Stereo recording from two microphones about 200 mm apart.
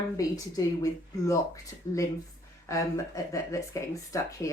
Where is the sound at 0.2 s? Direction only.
20° left (ahead or behind).